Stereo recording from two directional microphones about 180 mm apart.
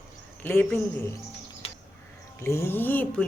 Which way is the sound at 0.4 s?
10° left (ahead or behind).